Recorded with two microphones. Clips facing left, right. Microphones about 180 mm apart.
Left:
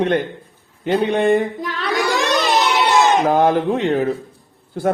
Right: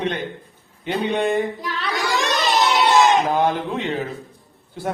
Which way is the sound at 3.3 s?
50° left (ahead or behind).